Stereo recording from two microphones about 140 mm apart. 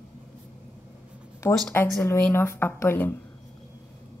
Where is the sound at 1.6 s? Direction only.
15° left (ahead or behind).